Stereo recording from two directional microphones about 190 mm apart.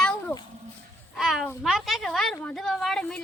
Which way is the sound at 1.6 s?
Centre (ahead or behind).